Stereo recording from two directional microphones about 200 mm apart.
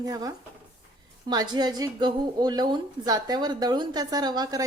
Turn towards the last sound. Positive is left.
turn(degrees=-20)  # may be behind; listen again after turning